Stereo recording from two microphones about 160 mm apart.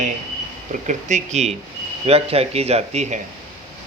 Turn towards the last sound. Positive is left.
turn(degrees=-45)  # may be behind; listen again after turning